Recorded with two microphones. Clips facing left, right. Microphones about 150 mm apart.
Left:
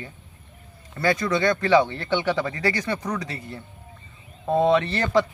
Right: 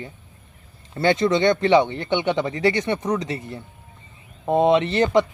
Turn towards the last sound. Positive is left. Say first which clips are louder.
# right 3 dB
turn(degrees=-20)  # may be behind; listen again after turning